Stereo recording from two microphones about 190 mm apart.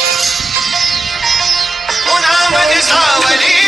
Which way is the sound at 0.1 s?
Centre (ahead or behind).